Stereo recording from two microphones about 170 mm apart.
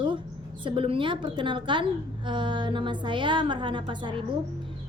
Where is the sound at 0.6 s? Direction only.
30° right (ahead or behind).